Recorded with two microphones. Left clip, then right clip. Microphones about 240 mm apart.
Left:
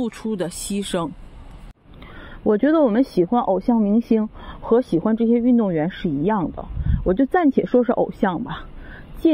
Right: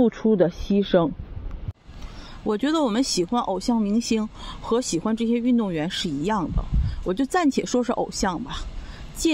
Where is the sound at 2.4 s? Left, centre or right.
Centre.